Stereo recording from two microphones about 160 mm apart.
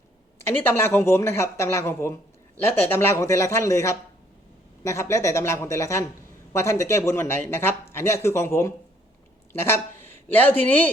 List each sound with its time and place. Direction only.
0.3 s speech: 15° left (ahead or behind)
10.2 s speech: 10° left (ahead or behind)